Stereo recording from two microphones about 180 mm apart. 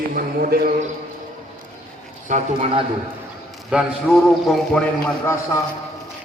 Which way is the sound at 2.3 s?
40° right (ahead or behind).